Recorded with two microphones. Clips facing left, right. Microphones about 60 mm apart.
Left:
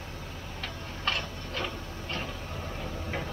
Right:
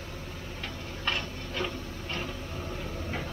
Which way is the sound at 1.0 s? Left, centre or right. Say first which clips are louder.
Even; centre.